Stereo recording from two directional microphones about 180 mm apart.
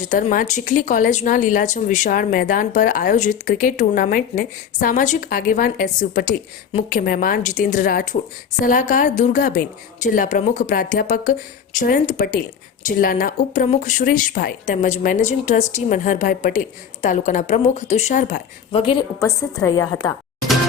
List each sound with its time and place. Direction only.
0.0 s speech: 45° left (ahead or behind)
18.7 s a woman's voice: 30° left (ahead or behind)
19.2 s a woman's voice: 15° left (ahead or behind)